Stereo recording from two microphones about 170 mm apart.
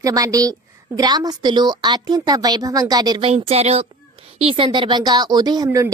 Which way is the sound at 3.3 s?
35° right (ahead or behind).